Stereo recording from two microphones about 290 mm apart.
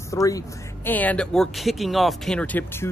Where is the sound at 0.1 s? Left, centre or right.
Centre.